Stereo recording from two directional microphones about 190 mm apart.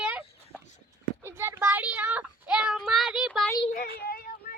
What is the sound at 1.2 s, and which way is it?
Child singing, 15° right (ahead or behind).